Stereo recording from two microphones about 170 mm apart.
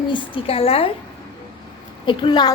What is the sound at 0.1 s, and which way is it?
Speech, 35° left (ahead or behind).